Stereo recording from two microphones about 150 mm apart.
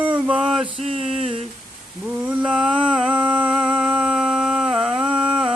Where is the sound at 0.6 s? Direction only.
40° right (ahead or behind).